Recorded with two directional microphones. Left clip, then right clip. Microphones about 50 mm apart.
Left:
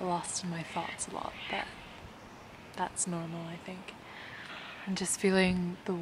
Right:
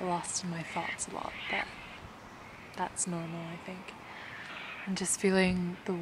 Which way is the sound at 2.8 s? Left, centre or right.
Centre.